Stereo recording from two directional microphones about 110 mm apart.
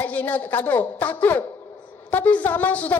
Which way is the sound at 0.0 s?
15° left (ahead or behind).